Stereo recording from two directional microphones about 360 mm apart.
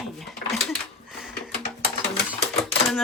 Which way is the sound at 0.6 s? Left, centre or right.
Centre.